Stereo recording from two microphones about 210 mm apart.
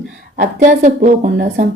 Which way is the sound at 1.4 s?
45° right (ahead or behind).